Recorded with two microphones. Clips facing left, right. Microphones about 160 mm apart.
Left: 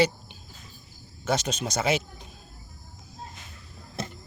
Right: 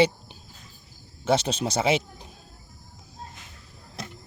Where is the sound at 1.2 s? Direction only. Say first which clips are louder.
Right 4 dB; 30° right (ahead or behind).